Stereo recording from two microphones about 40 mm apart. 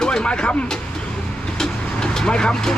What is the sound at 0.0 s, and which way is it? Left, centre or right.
Speech, left.